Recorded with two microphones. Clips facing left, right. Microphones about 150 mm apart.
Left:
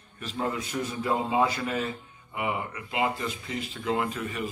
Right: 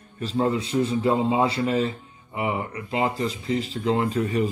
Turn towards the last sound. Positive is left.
turn(degrees=-40)  # may be behind; listen again after turning